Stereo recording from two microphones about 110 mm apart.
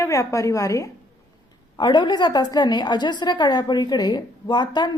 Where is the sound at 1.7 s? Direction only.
45° left (ahead or behind).